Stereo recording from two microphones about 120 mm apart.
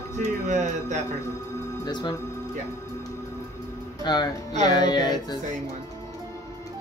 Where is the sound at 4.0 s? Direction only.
35° left (ahead or behind).